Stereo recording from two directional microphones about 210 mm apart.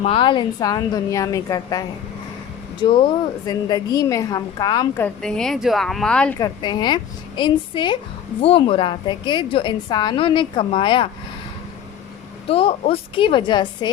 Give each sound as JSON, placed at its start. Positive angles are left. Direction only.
{"t": 0.0, "sound": "a woman's voice", "side_deg": 25}
{"t": 5.0, "sound": "a woman's voice", "side_deg": 5}
{"t": 6.4, "sound": "a woman's voice", "side_deg": 20}
{"t": 12.5, "sound": "a woman's voice", "side_deg": 30}